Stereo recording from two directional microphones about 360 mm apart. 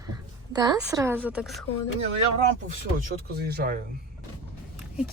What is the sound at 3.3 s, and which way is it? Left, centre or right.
Speech, right.